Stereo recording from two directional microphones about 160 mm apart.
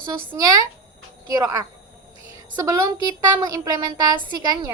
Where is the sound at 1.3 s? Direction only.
20° right (ahead or behind).